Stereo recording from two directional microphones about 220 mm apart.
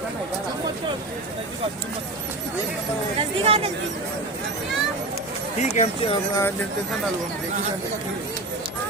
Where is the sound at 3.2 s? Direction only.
25° right (ahead or behind).